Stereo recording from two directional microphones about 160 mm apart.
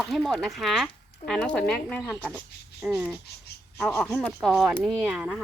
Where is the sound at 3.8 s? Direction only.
10° left (ahead or behind).